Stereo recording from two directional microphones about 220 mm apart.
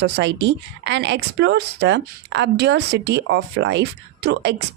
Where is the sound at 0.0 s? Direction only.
55° right (ahead or behind).